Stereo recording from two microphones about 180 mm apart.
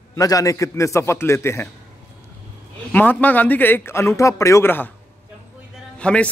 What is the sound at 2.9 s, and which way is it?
A man's voice, 10° left (ahead or behind).